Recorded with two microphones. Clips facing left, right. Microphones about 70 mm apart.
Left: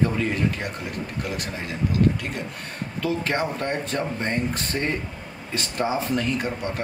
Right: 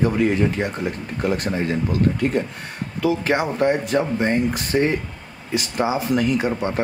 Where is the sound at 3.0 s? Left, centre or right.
Centre.